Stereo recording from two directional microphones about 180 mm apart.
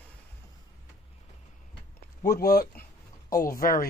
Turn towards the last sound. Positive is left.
turn(degrees=50)  # may be behind; listen again after turning